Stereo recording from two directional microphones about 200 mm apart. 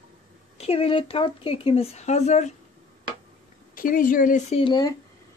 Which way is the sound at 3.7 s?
45° left (ahead or behind).